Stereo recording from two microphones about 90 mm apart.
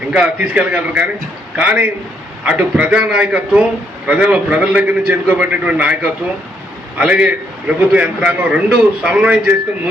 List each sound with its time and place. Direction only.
0.1 s a man's voice: 10° right (ahead or behind)
6.9 s a man's voice: 15° right (ahead or behind)